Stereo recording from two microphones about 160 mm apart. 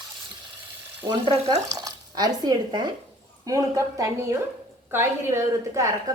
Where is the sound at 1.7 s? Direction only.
20° right (ahead or behind).